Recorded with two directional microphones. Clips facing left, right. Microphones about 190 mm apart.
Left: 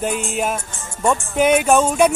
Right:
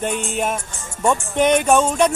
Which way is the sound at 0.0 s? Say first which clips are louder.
Left 1 dB; centre (ahead or behind).